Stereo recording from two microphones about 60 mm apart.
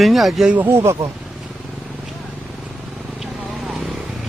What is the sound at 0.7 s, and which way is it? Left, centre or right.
Speech, right.